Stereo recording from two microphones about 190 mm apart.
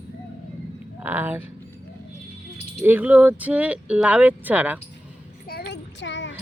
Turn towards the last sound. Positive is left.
turn(degrees=70)  # may be behind; listen again after turning